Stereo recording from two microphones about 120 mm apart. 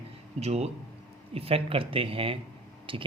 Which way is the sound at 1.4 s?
55° right (ahead or behind).